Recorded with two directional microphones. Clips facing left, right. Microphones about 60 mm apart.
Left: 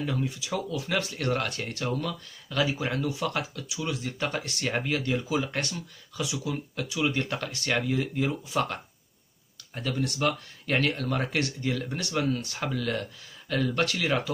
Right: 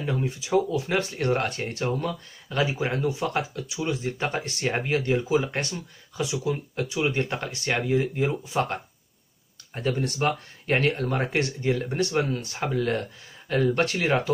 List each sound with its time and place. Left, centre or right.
0.0 s speech: right
9.8 s speech: right